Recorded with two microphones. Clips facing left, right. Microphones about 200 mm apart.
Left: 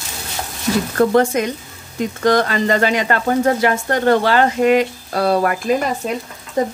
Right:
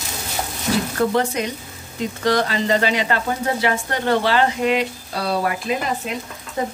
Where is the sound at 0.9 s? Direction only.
50° left (ahead or behind).